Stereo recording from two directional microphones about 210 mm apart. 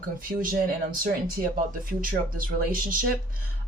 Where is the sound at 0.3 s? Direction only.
40° right (ahead or behind).